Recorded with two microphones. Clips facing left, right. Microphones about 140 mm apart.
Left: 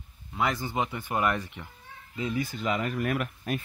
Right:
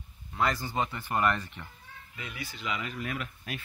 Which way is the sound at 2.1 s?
30° left (ahead or behind).